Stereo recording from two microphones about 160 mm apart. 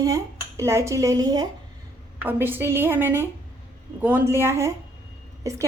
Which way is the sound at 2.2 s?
15° right (ahead or behind).